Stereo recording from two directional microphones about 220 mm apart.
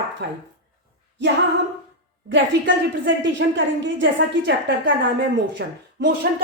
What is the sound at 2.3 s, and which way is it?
A woman's voice, 55° right (ahead or behind).